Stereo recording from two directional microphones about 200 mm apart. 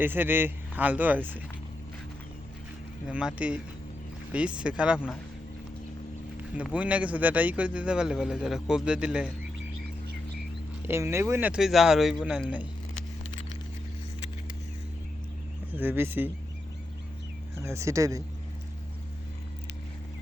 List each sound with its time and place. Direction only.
0.0 s speech: 10° right (ahead or behind)
3.1 s a man's voice: 5° right (ahead or behind)
6.6 s a man's voice: 5° right (ahead or behind)
10.8 s speech: 15° right (ahead or behind)
15.7 s speech: 10° right (ahead or behind)
17.6 s speech: 15° right (ahead or behind)